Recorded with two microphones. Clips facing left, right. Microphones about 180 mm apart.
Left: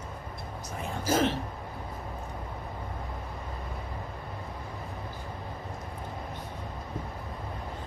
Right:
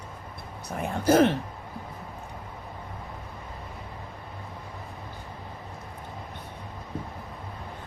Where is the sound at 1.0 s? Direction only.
60° right (ahead or behind).